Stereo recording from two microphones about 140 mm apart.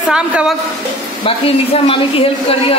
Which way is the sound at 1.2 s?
40° left (ahead or behind).